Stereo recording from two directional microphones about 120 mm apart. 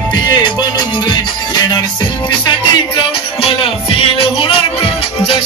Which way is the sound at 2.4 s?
45° left (ahead or behind).